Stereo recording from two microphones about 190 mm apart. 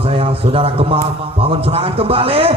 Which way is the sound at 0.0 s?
30° right (ahead or behind).